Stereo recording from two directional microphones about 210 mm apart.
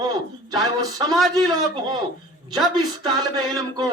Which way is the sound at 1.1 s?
Centre (ahead or behind).